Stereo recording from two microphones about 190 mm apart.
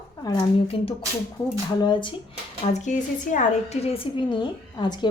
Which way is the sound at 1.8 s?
25° left (ahead or behind).